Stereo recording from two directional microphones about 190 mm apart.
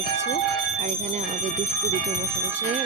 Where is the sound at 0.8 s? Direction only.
40° right (ahead or behind).